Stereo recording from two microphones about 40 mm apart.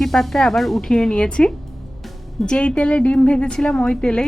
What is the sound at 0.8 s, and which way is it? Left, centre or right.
Speech, centre.